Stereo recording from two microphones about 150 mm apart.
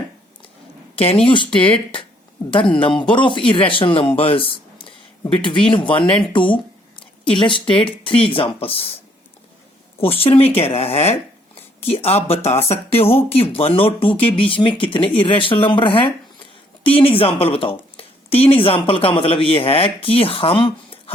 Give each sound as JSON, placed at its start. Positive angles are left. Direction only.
{"t": 0.9, "sound": "speech", "side_deg": 40}
{"t": 3.0, "sound": "speech", "side_deg": 35}
{"t": 10.0, "sound": "speech", "side_deg": 40}